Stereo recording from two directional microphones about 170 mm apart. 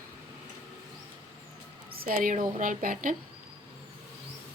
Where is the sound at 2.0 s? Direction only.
55° right (ahead or behind).